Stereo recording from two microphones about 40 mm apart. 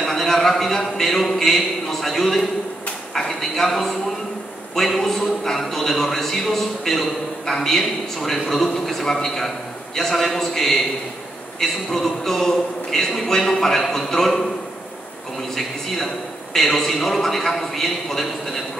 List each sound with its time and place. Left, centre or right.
0.0 s a man's voice: centre
16.5 s a man's voice: centre